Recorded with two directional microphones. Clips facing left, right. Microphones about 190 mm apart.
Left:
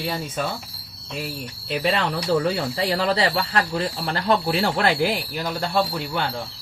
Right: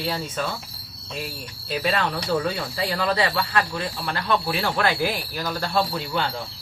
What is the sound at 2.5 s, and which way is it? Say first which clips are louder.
Speech: left 3 dB; 30° left (ahead or behind).